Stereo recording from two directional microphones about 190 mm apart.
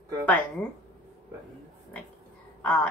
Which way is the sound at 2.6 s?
10° left (ahead or behind).